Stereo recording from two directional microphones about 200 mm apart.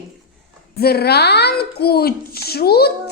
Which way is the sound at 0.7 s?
50° left (ahead or behind).